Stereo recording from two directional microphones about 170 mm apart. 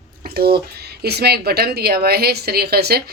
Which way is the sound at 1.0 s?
70° right (ahead or behind).